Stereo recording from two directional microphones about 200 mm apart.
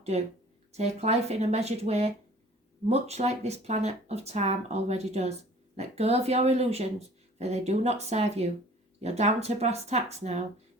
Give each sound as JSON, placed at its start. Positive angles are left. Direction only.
{"t": 0.1, "sound": "speech", "side_deg": -35}